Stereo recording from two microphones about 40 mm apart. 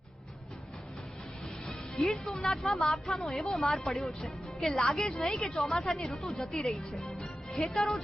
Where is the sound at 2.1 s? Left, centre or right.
Centre.